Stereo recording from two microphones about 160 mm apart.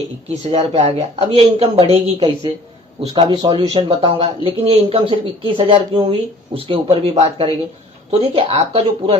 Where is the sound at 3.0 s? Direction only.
30° right (ahead or behind).